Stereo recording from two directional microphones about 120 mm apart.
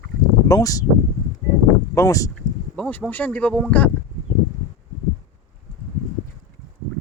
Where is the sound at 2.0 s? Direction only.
25° left (ahead or behind).